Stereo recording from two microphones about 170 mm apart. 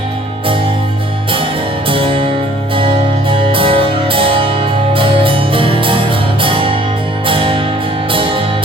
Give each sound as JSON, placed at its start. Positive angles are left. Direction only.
{"t": 1.9, "sound": "music", "side_deg": -30}